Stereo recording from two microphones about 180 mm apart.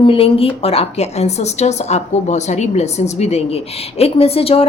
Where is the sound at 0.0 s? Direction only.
30° left (ahead or behind).